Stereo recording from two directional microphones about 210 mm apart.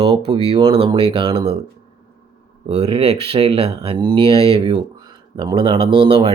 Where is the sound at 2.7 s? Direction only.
30° right (ahead or behind).